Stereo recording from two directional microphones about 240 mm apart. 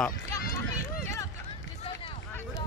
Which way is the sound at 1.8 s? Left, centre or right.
Left.